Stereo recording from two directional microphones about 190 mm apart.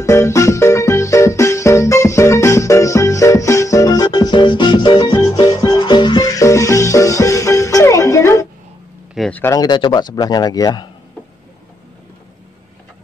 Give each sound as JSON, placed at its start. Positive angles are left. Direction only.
{"t": 0.0, "sound": "music", "side_deg": 15}
{"t": 9.1, "sound": "a sound", "side_deg": 0}
{"t": 9.4, "sound": "speech", "side_deg": 20}